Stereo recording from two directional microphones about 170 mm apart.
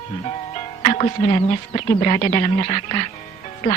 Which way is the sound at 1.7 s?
35° left (ahead or behind).